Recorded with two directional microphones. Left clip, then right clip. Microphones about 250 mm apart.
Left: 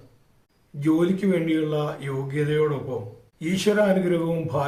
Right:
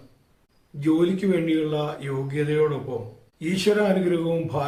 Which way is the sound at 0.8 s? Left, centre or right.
Centre.